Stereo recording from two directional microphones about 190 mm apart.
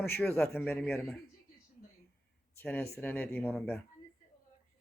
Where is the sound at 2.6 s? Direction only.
10° left (ahead or behind).